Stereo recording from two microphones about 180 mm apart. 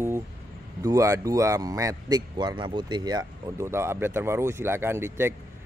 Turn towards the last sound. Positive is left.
turn(degrees=-15)  # may be behind; listen again after turning